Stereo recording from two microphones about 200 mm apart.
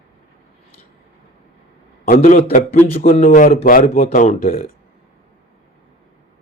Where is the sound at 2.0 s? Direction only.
40° left (ahead or behind).